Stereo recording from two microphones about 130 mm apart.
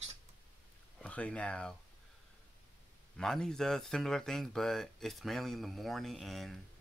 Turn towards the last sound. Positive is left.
turn(degrees=0)  # may be behind; listen again after turning